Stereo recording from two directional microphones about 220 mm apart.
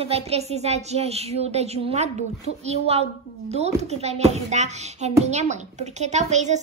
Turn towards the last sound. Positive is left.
turn(degrees=-30)  # may be behind; listen again after turning